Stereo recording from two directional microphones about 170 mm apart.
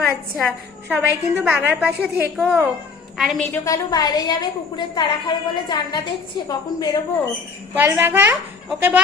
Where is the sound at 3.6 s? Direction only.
20° left (ahead or behind).